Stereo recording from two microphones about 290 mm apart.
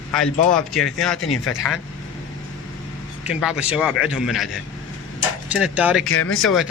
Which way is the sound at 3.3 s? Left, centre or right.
Centre.